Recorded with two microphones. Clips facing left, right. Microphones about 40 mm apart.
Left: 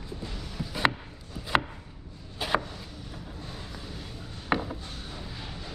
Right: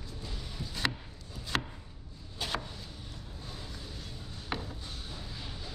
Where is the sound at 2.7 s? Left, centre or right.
Left.